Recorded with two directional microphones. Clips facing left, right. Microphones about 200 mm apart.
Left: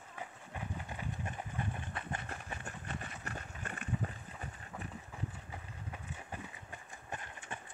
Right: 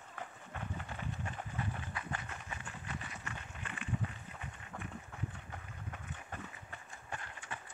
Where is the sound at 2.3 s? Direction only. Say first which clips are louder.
Left 2 dB; 45° left (ahead or behind).